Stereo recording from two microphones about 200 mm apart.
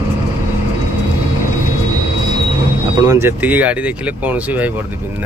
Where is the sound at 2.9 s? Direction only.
15° right (ahead or behind).